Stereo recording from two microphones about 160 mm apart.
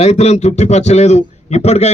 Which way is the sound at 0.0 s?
45° left (ahead or behind).